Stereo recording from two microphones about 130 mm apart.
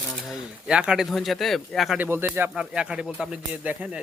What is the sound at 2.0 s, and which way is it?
Speech, 15° right (ahead or behind).